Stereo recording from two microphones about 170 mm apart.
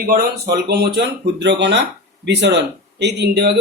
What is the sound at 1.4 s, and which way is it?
Speech, 90° right.